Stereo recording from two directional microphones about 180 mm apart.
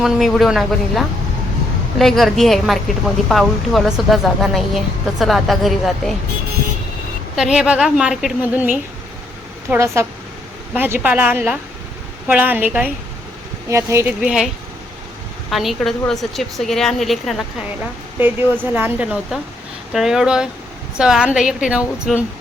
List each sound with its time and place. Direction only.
0.0 s a woman's voice: centre (ahead or behind)
7.3 s a woman's voice: 5° right (ahead or behind)
14.2 s a woman's voice: 5° right (ahead or behind)
18.2 s a woman's voice: 10° right (ahead or behind)